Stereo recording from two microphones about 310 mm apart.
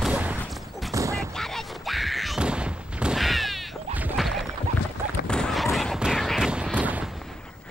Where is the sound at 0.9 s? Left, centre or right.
Centre.